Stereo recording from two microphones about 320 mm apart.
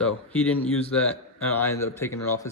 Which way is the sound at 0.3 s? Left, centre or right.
Centre.